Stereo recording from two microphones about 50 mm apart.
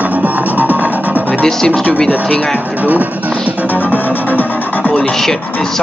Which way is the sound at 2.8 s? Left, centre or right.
Right.